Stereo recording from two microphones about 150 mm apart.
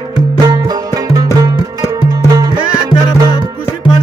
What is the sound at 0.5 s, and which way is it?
Music, 25° right (ahead or behind).